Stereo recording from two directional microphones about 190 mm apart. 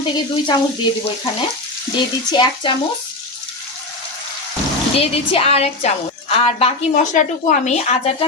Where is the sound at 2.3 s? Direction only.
25° left (ahead or behind).